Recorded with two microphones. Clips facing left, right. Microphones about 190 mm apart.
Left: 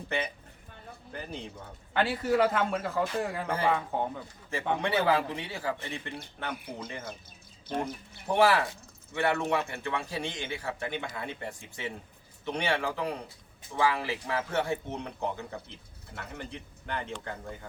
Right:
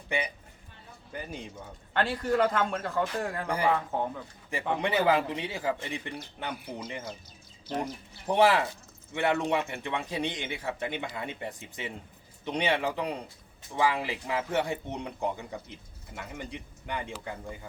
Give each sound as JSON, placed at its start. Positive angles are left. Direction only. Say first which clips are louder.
{"t": 0.1, "sound": "a man's voice", "louder": "right 1 dB", "side_deg": -15}
{"t": 1.9, "sound": "a man's voice", "louder": "left 1 dB", "side_deg": 5}
{"t": 4.8, "sound": "a man's voice", "louder": "right 2 dB", "side_deg": -20}
{"t": 8.3, "sound": "a man's voice", "louder": "right 1 dB", "side_deg": -20}